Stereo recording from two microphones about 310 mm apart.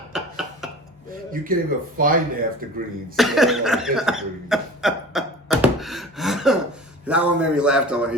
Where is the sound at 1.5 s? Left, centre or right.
Right.